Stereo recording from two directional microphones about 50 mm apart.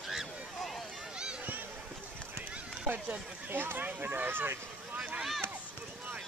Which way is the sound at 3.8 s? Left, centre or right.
Right.